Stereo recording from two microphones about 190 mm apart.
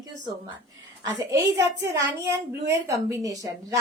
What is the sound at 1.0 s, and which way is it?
Speech, 20° right (ahead or behind).